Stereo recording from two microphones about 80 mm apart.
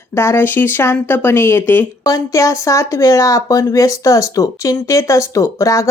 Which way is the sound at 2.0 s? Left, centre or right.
Left.